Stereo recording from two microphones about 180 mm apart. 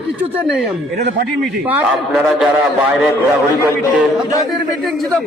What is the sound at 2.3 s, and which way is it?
Speech, 5° right (ahead or behind).